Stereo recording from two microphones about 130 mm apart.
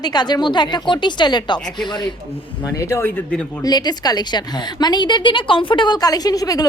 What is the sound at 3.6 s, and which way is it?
A woman's voice, 30° left (ahead or behind).